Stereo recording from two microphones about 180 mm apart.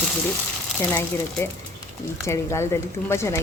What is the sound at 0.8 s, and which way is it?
A woman's voice, 15° left (ahead or behind).